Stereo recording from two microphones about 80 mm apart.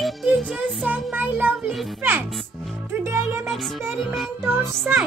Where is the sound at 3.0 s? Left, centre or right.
Right.